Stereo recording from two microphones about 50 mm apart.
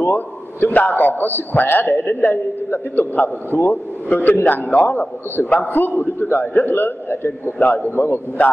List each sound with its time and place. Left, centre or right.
0.0 s a man's voice: left